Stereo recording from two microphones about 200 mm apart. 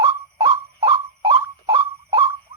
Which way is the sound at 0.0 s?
20° right (ahead or behind).